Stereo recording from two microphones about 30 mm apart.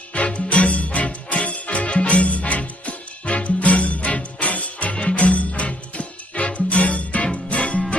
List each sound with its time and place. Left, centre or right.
0.3 s music: left